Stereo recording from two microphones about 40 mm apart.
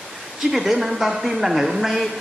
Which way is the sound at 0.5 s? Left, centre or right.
Centre.